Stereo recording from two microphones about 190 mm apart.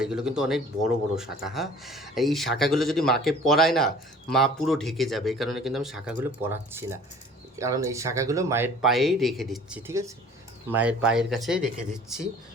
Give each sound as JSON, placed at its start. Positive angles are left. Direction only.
{"t": 0.0, "sound": "speech", "side_deg": -5}
{"t": 8.8, "sound": "speech", "side_deg": 0}